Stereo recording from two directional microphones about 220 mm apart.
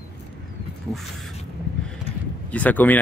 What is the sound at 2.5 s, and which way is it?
Speech, 5° left (ahead or behind).